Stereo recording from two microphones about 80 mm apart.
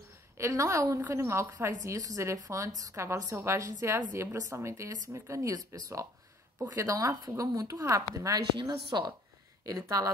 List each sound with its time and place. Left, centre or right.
0.4 s a woman's voice: right
8.6 s a woman's voice: right
9.7 s speech: right